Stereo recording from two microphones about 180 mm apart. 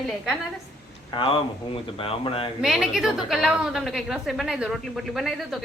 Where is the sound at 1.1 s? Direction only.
25° left (ahead or behind).